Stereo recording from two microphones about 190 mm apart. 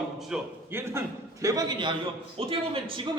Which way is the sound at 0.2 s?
5° right (ahead or behind).